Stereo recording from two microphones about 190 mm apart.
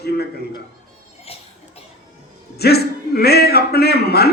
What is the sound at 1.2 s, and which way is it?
Cough, 30° left (ahead or behind).